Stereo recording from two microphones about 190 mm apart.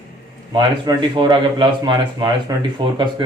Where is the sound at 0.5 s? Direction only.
25° right (ahead or behind).